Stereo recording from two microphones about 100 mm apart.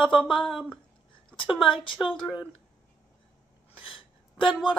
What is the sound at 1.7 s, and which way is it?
Speech, 55° left (ahead or behind).